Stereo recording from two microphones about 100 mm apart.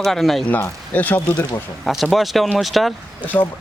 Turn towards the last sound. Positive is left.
turn(degrees=30)  # may be behind; listen again after turning